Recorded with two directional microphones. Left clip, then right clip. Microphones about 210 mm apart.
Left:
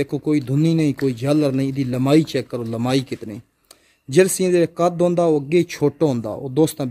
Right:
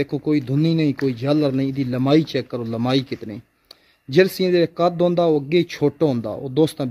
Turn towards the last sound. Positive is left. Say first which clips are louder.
# even
turn(degrees=0)  # may be behind; listen again after turning